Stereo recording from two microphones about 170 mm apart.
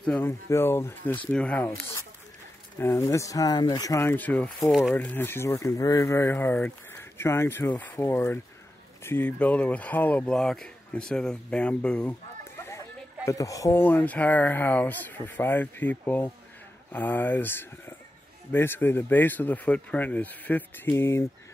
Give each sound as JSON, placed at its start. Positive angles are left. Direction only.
{"t": 0.0, "sound": "speech", "side_deg": 10}
{"t": 2.8, "sound": "speech", "side_deg": 15}
{"t": 12.6, "sound": "speech", "side_deg": 15}